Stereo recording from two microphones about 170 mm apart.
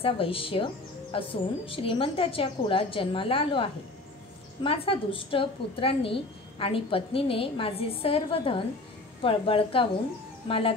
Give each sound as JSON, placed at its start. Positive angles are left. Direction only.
{"t": 0.0, "sound": "a woman's voice", "side_deg": 35}